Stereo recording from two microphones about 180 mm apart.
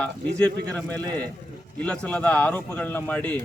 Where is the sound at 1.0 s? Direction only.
20° right (ahead or behind).